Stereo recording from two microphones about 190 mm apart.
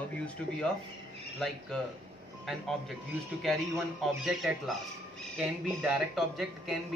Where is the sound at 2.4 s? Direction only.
Centre (ahead or behind).